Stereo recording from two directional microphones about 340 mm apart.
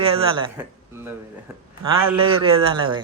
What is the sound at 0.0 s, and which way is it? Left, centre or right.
A man's voice, centre.